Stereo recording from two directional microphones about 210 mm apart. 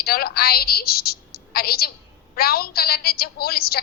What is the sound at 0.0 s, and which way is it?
A woman's voice, 45° left (ahead or behind).